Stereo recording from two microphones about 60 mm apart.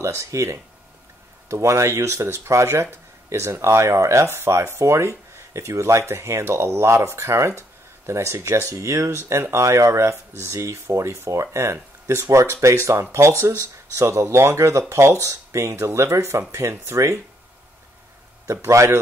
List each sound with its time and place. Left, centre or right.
0.2 s speech: right
18.5 s speech: right